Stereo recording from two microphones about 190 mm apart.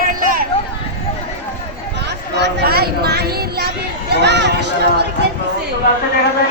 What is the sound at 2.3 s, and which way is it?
Speech, 60° right (ahead or behind).